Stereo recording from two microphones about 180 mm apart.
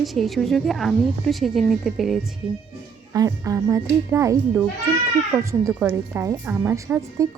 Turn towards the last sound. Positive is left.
turn(degrees=-10)  # may be behind; listen again after turning